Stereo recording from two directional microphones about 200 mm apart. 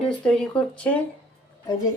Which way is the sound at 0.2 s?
5° left (ahead or behind).